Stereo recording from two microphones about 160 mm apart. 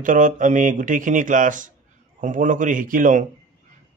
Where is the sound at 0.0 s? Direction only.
55° right (ahead or behind).